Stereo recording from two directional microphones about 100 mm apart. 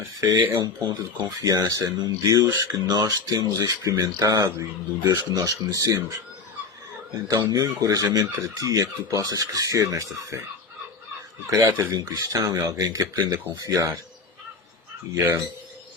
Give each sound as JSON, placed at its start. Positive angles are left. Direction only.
{"t": 0.2, "sound": "speech", "side_deg": -35}
{"t": 7.3, "sound": "speech", "side_deg": -40}
{"t": 11.8, "sound": "speech", "side_deg": -35}
{"t": 15.1, "sound": "speech", "side_deg": -35}